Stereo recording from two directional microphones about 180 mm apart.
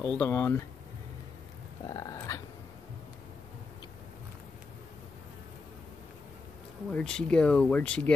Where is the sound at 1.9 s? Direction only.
20° left (ahead or behind).